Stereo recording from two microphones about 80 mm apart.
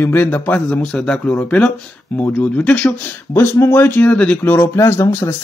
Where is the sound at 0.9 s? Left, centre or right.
Centre.